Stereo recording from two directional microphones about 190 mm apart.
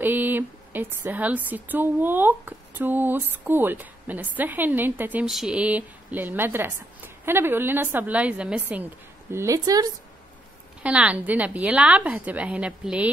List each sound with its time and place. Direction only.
0.0 s a woman's voice: 10° right (ahead or behind)
10.8 s a woman's voice: 5° right (ahead or behind)